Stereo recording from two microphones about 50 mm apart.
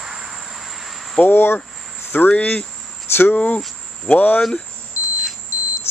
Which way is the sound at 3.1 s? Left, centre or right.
Left.